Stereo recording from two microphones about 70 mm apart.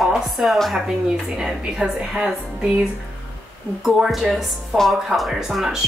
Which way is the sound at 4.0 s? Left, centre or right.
Centre.